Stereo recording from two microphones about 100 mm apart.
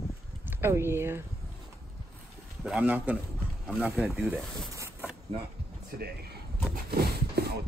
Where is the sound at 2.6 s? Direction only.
10° right (ahead or behind).